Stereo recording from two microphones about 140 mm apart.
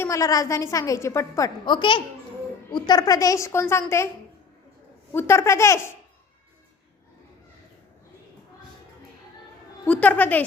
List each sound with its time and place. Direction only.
0.0 s a woman's voice: 20° left (ahead or behind)
1.6 s a woman's voice: 35° left (ahead or behind); by 4.1 s 20° left (ahead or behind)
5.1 s a woman's voice: 20° left (ahead or behind)
9.8 s a woman's voice: 10° left (ahead or behind)